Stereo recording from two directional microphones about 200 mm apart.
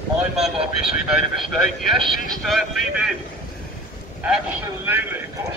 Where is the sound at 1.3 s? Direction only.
Centre (ahead or behind).